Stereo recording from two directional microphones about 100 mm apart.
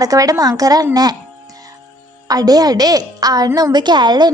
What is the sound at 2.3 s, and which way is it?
A woman's voice, 40° right (ahead or behind).